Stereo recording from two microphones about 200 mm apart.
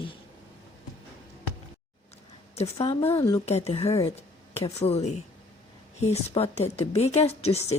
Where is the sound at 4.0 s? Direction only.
30° left (ahead or behind).